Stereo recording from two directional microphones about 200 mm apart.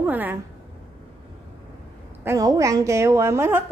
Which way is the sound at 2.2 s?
15° right (ahead or behind).